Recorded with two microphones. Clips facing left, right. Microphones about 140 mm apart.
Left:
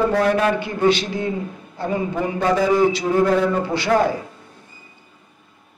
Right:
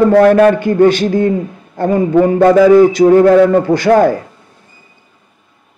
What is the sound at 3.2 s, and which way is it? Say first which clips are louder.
Speech: right 7 dB; 65° right (ahead or behind).